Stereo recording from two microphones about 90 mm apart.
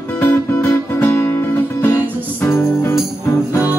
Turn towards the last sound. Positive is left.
turn(degrees=30)  # may be behind; listen again after turning